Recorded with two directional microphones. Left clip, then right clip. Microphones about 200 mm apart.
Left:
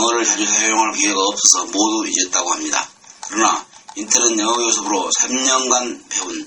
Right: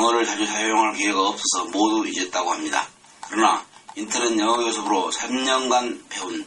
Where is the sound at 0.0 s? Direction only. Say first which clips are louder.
Left 3 dB; 25° left (ahead or behind).